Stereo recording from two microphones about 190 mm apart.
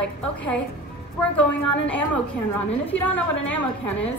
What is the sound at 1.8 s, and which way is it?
A woman's voice, 5° left (ahead or behind).